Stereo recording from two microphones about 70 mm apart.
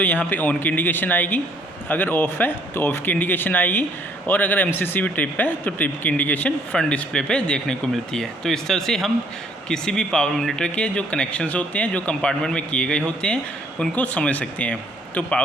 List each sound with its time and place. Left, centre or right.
0.0 s speech: left